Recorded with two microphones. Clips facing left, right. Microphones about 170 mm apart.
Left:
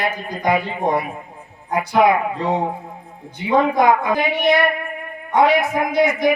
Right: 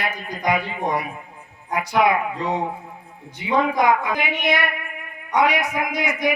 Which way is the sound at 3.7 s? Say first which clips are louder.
Left 3 dB; 30° left (ahead or behind).